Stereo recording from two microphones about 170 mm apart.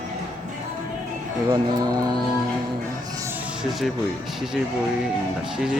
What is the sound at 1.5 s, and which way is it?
Speech, 25° right (ahead or behind).